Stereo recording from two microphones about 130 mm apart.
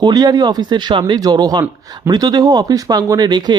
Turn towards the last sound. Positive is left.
turn(degrees=-35)  # may be behind; listen again after turning